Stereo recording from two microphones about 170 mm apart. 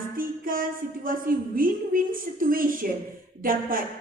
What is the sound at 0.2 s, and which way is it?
A woman's voice, 55° right (ahead or behind).